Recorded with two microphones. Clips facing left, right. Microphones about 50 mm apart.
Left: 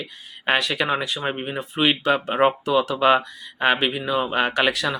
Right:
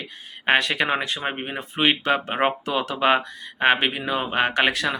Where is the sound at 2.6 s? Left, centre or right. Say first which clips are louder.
Left 3 dB; right.